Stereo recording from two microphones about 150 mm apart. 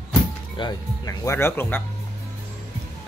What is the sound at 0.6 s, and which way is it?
Speech, 25° left (ahead or behind).